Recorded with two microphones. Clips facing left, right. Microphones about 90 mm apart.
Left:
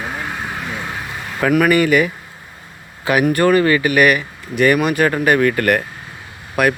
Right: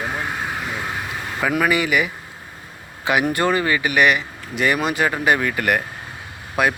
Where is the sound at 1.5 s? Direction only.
15° right (ahead or behind).